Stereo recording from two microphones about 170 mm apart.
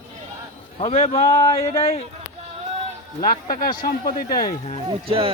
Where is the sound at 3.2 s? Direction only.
60° left (ahead or behind).